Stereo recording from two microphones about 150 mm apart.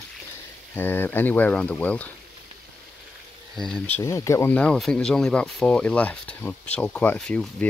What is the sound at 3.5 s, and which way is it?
Speech, 5° left (ahead or behind).